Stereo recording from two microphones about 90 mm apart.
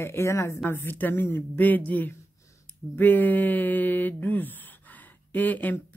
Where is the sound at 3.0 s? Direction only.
20° left (ahead or behind).